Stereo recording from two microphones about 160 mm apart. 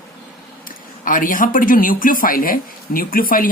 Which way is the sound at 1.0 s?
60° left (ahead or behind).